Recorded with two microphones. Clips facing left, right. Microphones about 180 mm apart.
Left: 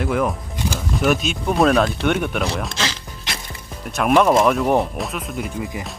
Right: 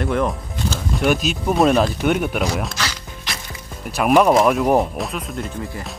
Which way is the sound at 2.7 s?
20° left (ahead or behind).